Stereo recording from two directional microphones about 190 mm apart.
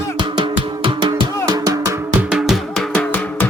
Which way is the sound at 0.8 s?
25° right (ahead or behind).